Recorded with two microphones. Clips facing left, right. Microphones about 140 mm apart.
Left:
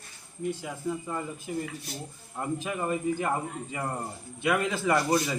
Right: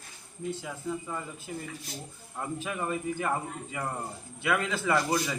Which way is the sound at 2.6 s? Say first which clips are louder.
Left 1 dB; 15° left (ahead or behind).